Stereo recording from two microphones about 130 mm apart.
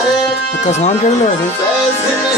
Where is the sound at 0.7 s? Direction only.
60° left (ahead or behind).